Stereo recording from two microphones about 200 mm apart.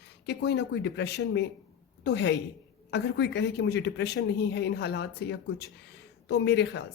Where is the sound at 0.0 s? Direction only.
55° left (ahead or behind).